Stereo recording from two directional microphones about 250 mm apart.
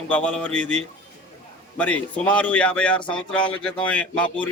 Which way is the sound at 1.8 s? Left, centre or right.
Centre.